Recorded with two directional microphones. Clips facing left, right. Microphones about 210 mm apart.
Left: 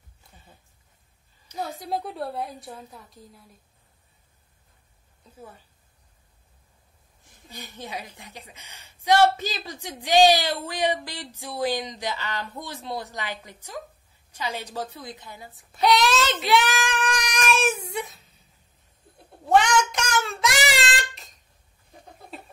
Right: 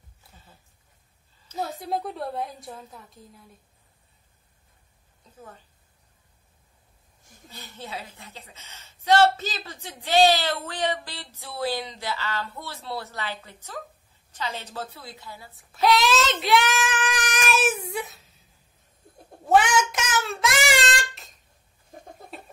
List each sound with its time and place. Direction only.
1.6 s a woman's voice: centre (ahead or behind)
7.4 s a woman's voice: 15° left (ahead or behind)
15.5 s child singing: centre (ahead or behind)
19.5 s child singing: 5° right (ahead or behind)